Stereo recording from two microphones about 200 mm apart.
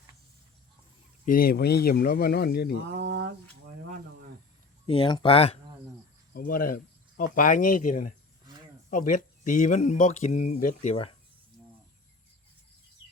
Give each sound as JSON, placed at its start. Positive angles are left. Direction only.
{"t": 1.2, "sound": "speech", "side_deg": 45}
{"t": 2.9, "sound": "a sound", "side_deg": -55}
{"t": 4.9, "sound": "speech", "side_deg": 25}
{"t": 6.3, "sound": "speech", "side_deg": 45}